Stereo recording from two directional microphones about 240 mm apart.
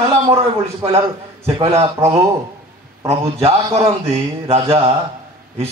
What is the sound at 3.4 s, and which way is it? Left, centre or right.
Speech, right.